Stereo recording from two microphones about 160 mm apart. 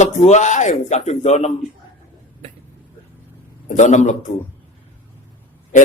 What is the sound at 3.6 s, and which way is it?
Speech, 50° left (ahead or behind).